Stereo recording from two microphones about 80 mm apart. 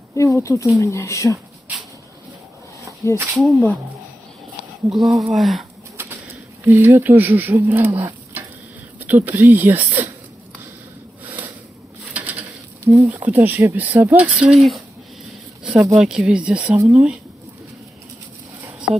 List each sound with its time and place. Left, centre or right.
0.1 s speech: left
3.0 s speech: left
3.3 s speech: centre
5.3 s speech: centre
6.6 s speech: right
7.8 s stir: right
9.0 s speech: right
11.2 s a sound: right
12.8 s speech: right
13.1 s speech: right
15.6 s speech: centre
18.9 s speech: centre